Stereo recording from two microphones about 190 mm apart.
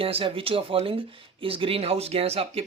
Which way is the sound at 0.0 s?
30° right (ahead or behind).